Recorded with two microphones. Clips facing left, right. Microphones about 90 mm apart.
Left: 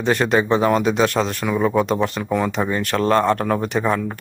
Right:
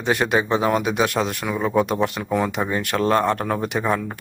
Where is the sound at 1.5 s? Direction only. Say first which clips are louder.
Left 2 dB; centre (ahead or behind).